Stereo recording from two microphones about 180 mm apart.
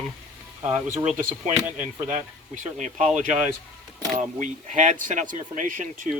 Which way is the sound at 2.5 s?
45° right (ahead or behind).